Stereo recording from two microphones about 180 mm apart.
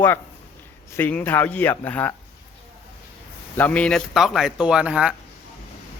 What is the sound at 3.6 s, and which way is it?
Speech, 10° left (ahead or behind).